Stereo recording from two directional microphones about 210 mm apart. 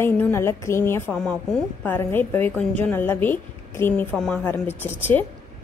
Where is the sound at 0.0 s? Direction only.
10° left (ahead or behind).